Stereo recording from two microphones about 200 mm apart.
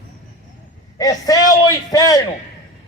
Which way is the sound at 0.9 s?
20° left (ahead or behind).